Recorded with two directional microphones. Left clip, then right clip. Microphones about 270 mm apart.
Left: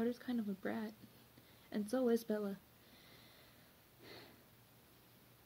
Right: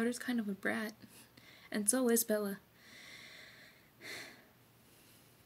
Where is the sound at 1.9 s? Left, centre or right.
Right.